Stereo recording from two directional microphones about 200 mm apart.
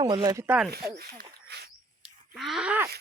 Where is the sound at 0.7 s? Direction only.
50° right (ahead or behind).